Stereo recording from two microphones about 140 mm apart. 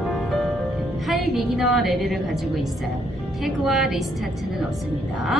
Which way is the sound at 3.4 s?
Centre (ahead or behind).